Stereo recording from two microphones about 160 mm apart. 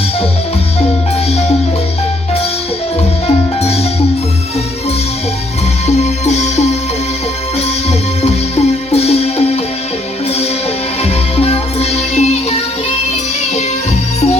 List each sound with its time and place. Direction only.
1.3 s music: 40° left (ahead or behind)
3.2 s music: 40° left (ahead or behind)
6.0 s music: 45° left (ahead or behind)
7.9 s music: 40° left (ahead or behind)
11.0 s music: 40° left (ahead or behind)